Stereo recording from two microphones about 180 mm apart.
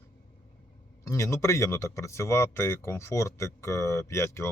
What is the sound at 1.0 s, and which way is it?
Speech, 15° left (ahead or behind).